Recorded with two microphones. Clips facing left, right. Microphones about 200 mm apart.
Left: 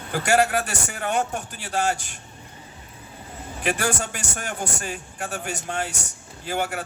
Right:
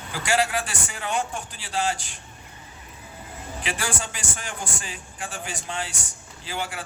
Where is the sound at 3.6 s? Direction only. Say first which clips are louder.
Left 6 dB; 50° left (ahead or behind).